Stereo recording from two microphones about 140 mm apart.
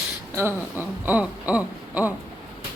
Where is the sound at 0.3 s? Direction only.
15° right (ahead or behind).